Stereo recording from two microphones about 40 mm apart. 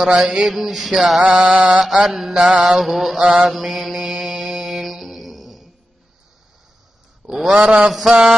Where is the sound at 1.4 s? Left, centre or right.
Right.